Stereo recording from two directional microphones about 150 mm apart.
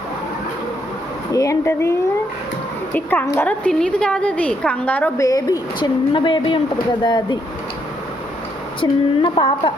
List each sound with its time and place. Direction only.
1.3 s a woman's voice: 20° left (ahead or behind)
8.8 s speech: 35° left (ahead or behind)